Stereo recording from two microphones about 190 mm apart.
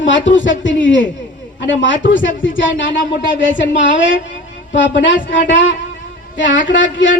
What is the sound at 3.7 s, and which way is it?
A man's voice, 75° left (ahead or behind).